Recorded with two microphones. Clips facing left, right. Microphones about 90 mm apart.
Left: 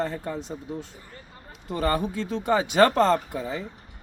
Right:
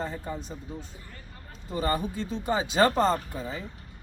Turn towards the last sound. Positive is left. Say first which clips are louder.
# left 5 dB
turn(degrees=75)  # may be behind; listen again after turning